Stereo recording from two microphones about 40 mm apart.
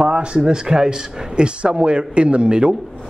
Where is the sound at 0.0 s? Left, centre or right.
Right.